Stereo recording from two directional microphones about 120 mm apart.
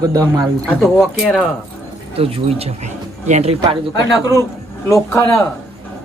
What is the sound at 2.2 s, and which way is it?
Speech, 55° right (ahead or behind).